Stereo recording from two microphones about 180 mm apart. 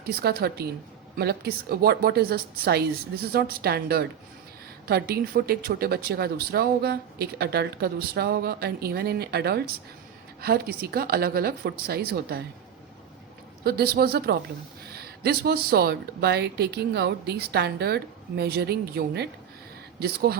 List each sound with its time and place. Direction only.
0.0 s speech: 60° right (ahead or behind)
13.7 s speech: 60° right (ahead or behind)